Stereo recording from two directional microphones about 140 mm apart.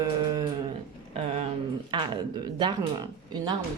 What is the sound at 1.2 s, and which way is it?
Speech, 50° right (ahead or behind).